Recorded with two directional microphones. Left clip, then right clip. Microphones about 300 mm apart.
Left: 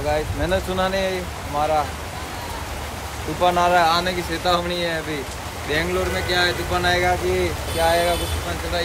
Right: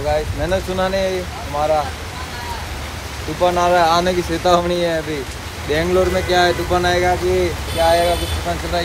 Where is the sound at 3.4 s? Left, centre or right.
Centre.